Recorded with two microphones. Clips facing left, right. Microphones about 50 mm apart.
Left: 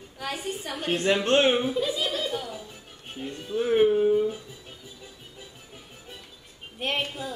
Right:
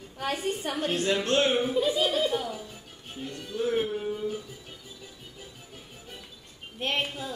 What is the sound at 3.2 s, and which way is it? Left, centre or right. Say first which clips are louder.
Speech: left 3 dB; left.